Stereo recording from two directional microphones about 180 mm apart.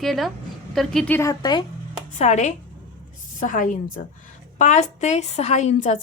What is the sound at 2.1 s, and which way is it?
A woman's voice, 40° left (ahead or behind).